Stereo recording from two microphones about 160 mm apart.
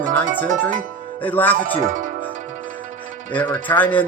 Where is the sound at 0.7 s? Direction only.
55° right (ahead or behind).